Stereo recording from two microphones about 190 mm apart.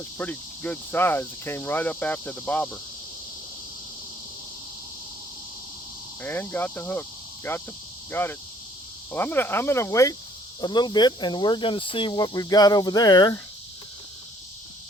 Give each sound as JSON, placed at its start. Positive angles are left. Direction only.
{"t": 0.2, "sound": "cricket", "side_deg": 10}
{"t": 6.2, "sound": "cricket", "side_deg": 10}
{"t": 10.6, "sound": "speech", "side_deg": 25}